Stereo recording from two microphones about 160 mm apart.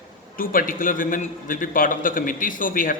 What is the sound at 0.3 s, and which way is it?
A man's voice, 60° left (ahead or behind).